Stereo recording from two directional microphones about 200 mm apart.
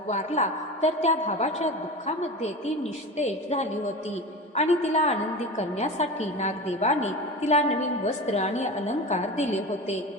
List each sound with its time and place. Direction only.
0.1 s a woman's voice: 35° left (ahead or behind)